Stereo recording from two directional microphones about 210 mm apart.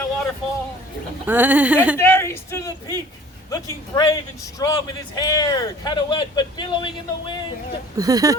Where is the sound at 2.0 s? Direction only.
10° left (ahead or behind).